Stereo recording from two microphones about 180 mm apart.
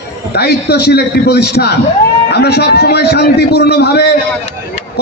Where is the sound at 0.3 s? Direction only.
65° left (ahead or behind).